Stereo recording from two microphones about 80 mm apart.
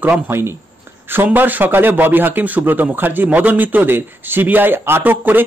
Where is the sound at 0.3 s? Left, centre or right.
Right.